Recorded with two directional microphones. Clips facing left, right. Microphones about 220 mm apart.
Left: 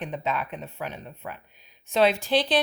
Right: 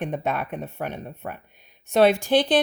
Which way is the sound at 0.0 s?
50° right (ahead or behind).